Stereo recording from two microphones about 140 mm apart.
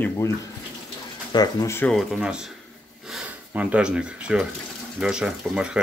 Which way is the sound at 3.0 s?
5° right (ahead or behind).